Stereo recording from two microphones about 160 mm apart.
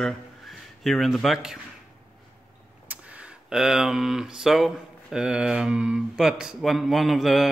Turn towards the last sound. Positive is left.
turn(degrees=0)  # may be behind; listen again after turning